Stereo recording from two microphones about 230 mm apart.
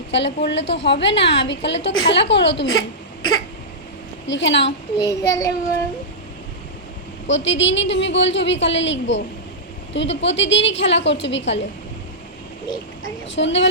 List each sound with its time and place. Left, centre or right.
0.1 s a woman's voice: left
4.3 s a woman's voice: left
4.9 s child singing: centre
7.3 s a woman's voice: left
13.3 s a woman's voice: left